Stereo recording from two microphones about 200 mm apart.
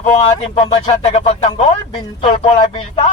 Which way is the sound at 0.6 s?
20° left (ahead or behind).